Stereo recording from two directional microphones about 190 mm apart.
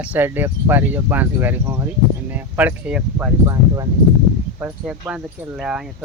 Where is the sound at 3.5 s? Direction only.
20° right (ahead or behind).